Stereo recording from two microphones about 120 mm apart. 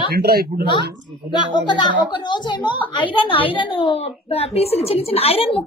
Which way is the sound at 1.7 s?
40° left (ahead or behind).